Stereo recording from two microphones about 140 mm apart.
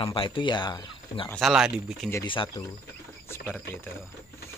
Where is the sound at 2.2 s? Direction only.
35° left (ahead or behind).